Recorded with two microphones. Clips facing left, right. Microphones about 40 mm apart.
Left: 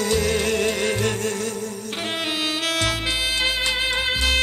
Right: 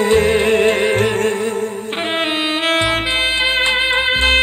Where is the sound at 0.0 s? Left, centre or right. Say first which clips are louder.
Right 8 dB; right.